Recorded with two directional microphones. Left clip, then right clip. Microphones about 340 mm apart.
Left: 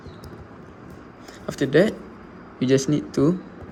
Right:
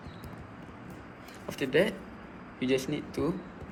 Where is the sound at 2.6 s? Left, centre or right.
Left.